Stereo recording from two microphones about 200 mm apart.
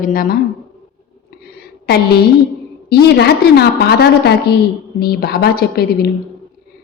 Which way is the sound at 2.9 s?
55° left (ahead or behind).